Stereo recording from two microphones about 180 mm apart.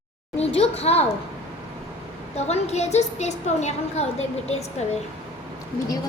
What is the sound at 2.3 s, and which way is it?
A woman's voice, 35° left (ahead or behind).